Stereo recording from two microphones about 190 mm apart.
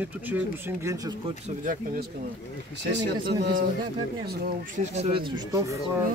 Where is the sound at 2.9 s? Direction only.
70° right (ahead or behind).